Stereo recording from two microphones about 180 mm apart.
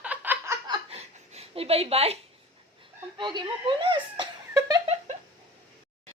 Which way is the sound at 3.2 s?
25° right (ahead or behind).